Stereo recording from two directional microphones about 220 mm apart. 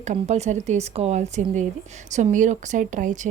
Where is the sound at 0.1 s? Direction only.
30° right (ahead or behind).